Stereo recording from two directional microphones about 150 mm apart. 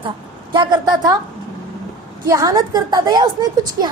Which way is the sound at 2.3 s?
25° right (ahead or behind).